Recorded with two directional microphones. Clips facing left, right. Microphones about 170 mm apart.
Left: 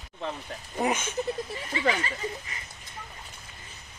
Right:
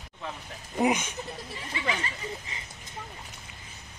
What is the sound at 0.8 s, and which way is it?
Speech, 15° right (ahead or behind).